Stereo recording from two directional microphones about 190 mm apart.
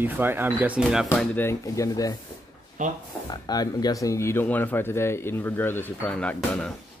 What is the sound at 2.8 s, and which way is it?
Speech, 40° right (ahead or behind).